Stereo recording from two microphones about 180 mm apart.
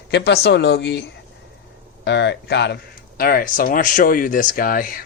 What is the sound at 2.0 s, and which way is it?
Speech, 75° left (ahead or behind).